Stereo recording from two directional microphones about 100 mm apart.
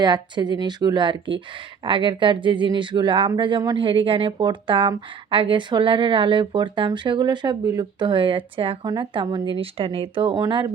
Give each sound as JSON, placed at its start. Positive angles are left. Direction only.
{"t": 0.0, "sound": "speech", "side_deg": -45}
{"t": 3.8, "sound": "speech", "side_deg": -60}
{"t": 8.0, "sound": "speech", "side_deg": -55}
{"t": 8.8, "sound": "speech", "side_deg": -50}